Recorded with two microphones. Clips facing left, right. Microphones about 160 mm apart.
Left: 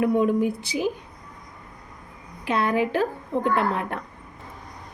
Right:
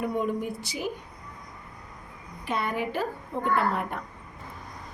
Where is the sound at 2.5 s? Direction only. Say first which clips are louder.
Left 7 dB; 90° left.